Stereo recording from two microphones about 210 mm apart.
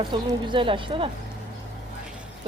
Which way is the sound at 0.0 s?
20° right (ahead or behind).